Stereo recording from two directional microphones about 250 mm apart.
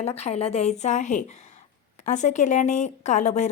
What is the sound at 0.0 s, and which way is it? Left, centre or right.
A woman's voice, left.